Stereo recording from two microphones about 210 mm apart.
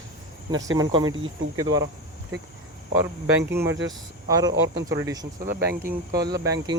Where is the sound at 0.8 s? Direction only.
20° right (ahead or behind).